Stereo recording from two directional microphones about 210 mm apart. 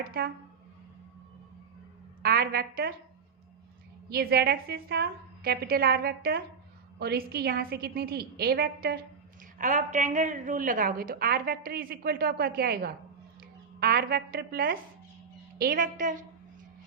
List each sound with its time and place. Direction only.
0.0 s a woman's voice: 45° right (ahead or behind)
2.2 s a woman's voice: 45° right (ahead or behind)
4.1 s a woman's voice: 50° right (ahead or behind)
9.6 s a woman's voice: 35° right (ahead or behind)